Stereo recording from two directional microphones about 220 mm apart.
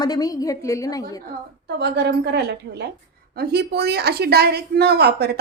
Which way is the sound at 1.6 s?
50° right (ahead or behind).